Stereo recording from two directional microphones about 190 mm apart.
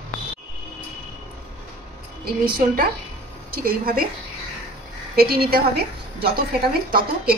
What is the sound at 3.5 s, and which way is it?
Speech, 50° right (ahead or behind).